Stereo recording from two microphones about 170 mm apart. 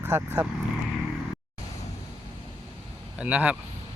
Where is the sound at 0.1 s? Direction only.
15° right (ahead or behind).